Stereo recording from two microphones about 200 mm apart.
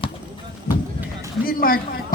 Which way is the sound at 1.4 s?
45° left (ahead or behind).